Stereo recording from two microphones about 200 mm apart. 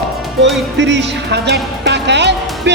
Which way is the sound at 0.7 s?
65° right (ahead or behind).